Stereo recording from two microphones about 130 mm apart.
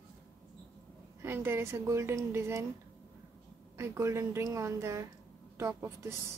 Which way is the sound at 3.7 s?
20° right (ahead or behind).